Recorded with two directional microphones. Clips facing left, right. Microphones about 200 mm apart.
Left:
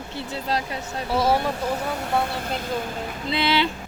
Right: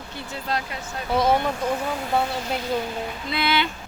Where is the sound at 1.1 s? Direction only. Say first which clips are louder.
Right 1 dB; 5° left (ahead or behind).